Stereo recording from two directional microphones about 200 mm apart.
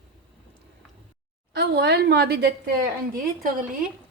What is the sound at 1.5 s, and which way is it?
A woman's voice, 55° right (ahead or behind).